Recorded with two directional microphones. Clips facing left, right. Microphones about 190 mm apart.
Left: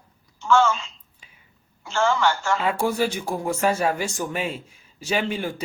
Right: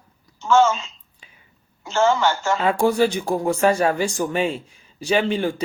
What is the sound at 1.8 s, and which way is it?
Speech, 20° right (ahead or behind).